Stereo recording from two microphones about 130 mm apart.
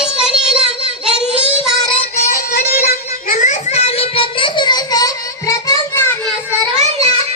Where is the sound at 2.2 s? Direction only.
90° left.